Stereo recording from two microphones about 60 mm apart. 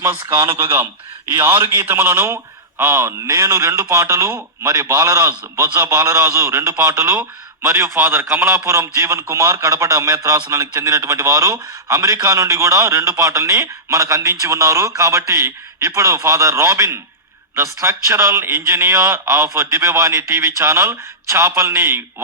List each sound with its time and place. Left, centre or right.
0.3 s a man's voice: right